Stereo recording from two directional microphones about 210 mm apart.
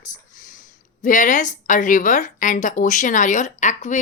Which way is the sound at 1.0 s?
35° left (ahead or behind).